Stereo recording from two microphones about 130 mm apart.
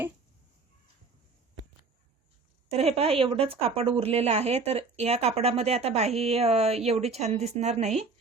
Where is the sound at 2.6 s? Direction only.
55° right (ahead or behind).